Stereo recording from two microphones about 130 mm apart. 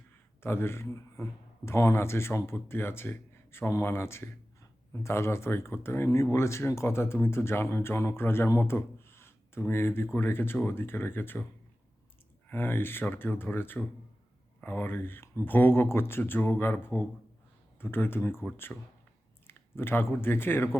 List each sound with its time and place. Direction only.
0.4 s speech: 20° left (ahead or behind)
12.5 s speech: 15° left (ahead or behind)